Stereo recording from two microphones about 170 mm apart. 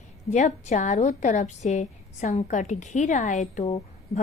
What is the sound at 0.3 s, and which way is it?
A woman's voice, 45° left (ahead or behind).